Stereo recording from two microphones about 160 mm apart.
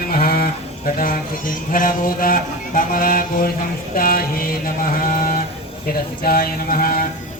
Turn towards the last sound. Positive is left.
turn(degrees=65)  # may be behind; listen again after turning